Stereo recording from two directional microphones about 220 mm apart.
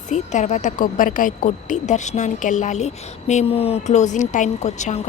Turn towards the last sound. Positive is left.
turn(degrees=30)  # may be behind; listen again after turning